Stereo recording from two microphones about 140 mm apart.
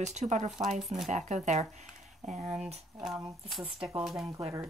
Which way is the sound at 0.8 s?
Centre (ahead or behind).